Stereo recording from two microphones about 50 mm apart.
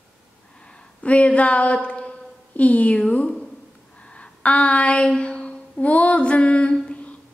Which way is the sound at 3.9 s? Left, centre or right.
Left.